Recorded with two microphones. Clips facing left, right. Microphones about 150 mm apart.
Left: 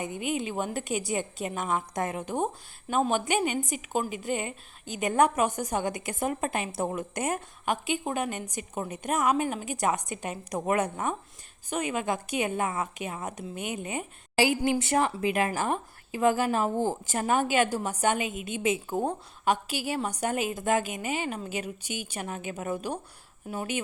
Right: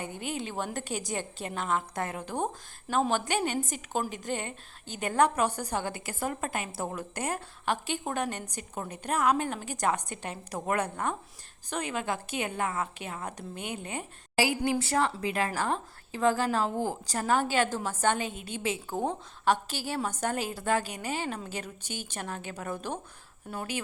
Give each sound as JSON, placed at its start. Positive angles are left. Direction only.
{"t": 0.0, "sound": "a woman's voice", "side_deg": 15}
{"t": 14.3, "sound": "a woman's voice", "side_deg": 25}